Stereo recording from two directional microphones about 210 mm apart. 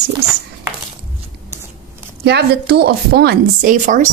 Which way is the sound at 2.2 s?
50° right (ahead or behind).